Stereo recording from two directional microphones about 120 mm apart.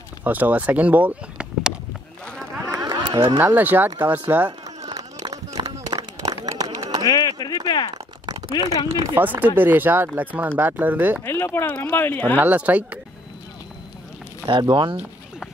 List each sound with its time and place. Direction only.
0.2 s speech: 15° right (ahead or behind)
2.7 s music: 35° right (ahead or behind)
3.3 s speech: 15° right (ahead or behind)
4.5 s a sound: 35° right (ahead or behind)
7.1 s speech: 30° left (ahead or behind)
7.9 s speech: 30° right (ahead or behind)
9.2 s speech: 15° right (ahead or behind)
11.2 s speech: 20° left (ahead or behind)
12.4 s speech: 10° right (ahead or behind)
14.5 s speech: 40° right (ahead or behind)